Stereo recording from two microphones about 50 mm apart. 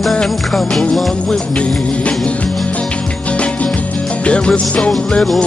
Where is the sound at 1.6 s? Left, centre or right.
Left.